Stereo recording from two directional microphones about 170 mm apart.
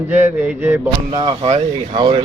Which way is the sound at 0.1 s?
15° right (ahead or behind).